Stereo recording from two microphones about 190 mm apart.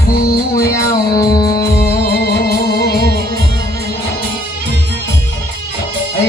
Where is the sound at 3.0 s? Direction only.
55° right (ahead or behind).